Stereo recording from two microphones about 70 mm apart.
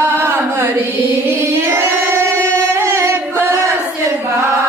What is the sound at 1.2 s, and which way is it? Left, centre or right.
Singing, right.